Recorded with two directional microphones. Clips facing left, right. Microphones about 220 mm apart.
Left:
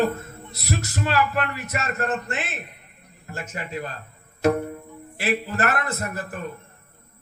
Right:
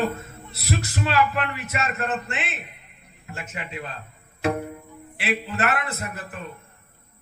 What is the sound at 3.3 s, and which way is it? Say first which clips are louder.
Music: left 2 dB; 35° left (ahead or behind).